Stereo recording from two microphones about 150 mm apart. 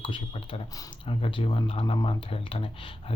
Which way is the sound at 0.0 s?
35° left (ahead or behind).